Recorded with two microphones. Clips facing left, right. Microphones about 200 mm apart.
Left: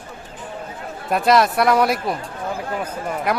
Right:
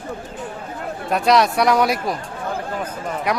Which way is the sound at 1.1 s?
Centre (ahead or behind).